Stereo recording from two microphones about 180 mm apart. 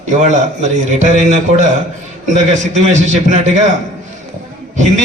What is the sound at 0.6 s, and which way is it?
A man's voice, 40° right (ahead or behind).